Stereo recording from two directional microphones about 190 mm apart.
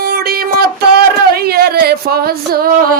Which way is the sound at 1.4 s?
55° right (ahead or behind).